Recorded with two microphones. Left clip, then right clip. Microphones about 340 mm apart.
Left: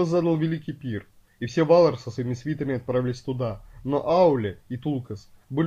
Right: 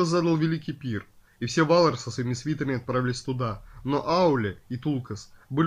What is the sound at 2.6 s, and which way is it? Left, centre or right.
Speech, centre.